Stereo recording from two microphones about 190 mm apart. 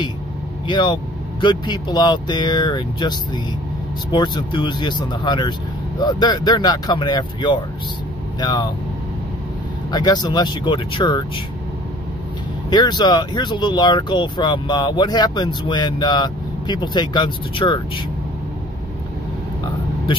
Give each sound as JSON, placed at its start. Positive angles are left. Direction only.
{"t": 0.7, "sound": "speech", "side_deg": 25}
{"t": 9.8, "sound": "speech", "side_deg": 20}
{"t": 12.6, "sound": "speech", "side_deg": 25}